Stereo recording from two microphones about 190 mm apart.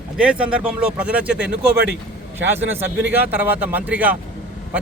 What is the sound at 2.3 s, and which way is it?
A man's voice, 10° right (ahead or behind).